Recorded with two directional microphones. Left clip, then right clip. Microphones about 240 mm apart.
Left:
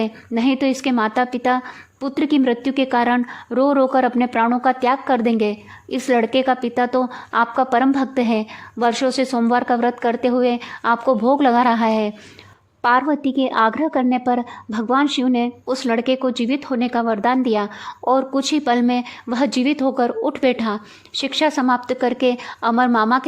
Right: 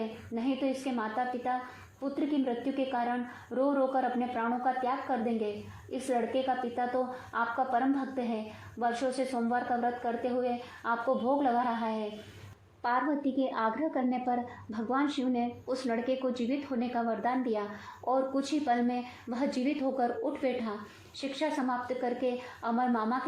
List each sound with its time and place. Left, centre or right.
0.3 s a woman's voice: left
12.8 s a woman's voice: left